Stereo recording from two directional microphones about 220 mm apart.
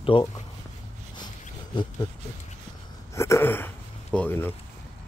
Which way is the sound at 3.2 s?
10° left (ahead or behind).